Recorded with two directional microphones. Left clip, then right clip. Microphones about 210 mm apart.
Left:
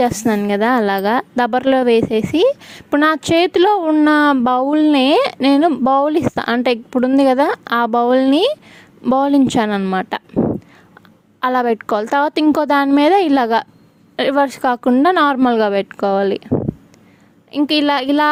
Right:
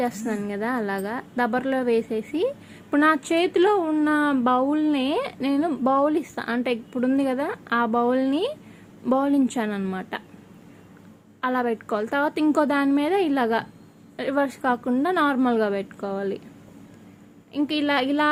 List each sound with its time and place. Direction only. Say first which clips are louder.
0.0 s speech: left 11 dB; 45° left (ahead or behind)
11.3 s speech: left 9 dB; 50° left (ahead or behind)
17.5 s speech: left 8 dB; 45° left (ahead or behind)